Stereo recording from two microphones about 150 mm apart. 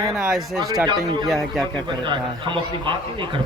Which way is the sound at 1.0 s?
25° right (ahead or behind).